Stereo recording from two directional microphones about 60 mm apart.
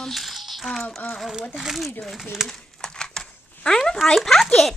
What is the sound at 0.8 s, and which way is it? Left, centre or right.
Speech, left.